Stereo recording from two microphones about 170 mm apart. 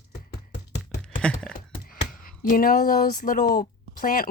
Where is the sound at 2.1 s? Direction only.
55° left (ahead or behind).